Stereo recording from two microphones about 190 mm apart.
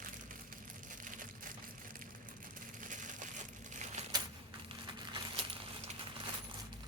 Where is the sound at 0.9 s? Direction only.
45° right (ahead or behind).